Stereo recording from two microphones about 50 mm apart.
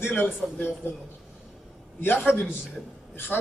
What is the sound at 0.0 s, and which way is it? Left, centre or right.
Speech, left.